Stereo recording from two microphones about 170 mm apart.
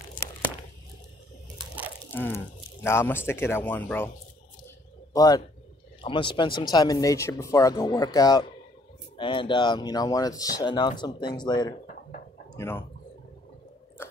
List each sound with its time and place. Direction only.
2.1 s speech: 15° left (ahead or behind)
5.1 s a man's voice: 20° left (ahead or behind)
12.5 s speech: 15° left (ahead or behind)